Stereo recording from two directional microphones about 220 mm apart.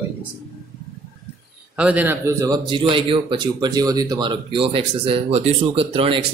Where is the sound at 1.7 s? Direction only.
5° right (ahead or behind).